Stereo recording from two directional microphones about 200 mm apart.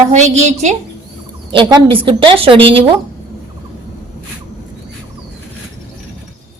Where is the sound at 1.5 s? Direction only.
25° right (ahead or behind).